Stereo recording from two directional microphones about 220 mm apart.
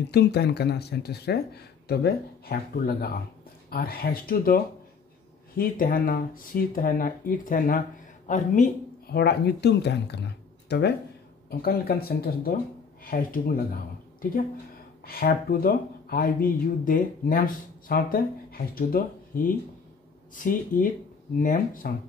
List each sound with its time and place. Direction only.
0.1 s speech: 50° left (ahead or behind)
5.6 s speech: 40° left (ahead or behind)
9.1 s speech: 45° left (ahead or behind)
15.0 s speech: 45° left (ahead or behind)